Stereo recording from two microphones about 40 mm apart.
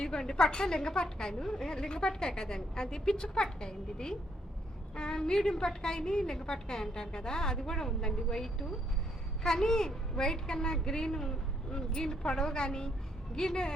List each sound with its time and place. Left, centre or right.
0.0 s a woman's voice: centre